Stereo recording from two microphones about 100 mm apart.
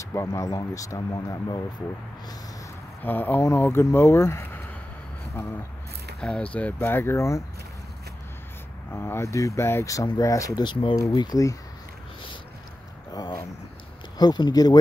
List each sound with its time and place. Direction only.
0.0 s speech: 30° left (ahead or behind)
3.0 s speech: 20° left (ahead or behind)
6.2 s speech: 10° left (ahead or behind); by 7.4 s 30° left (ahead or behind)
8.9 s speech: 25° left (ahead or behind)
10.6 s speech: 55° left (ahead or behind)
11.0 s speech: 40° left (ahead or behind)
13.1 s a sound: 45° left (ahead or behind)
14.1 s speech: 45° left (ahead or behind)